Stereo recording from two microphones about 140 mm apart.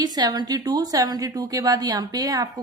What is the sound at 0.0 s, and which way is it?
A woman's voice, 30° right (ahead or behind).